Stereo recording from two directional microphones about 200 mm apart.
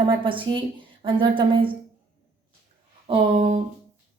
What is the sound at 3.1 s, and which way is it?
Speech, 30° right (ahead or behind).